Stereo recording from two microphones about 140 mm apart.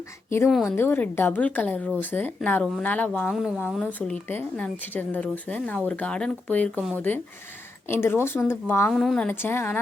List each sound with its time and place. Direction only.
0.4 s a woman's voice: centre (ahead or behind)
0.8 s speech: 15° left (ahead or behind)
7.9 s speech: 15° left (ahead or behind)
8.9 s a woman's voice: centre (ahead or behind)
9.3 s speech: 15° left (ahead or behind)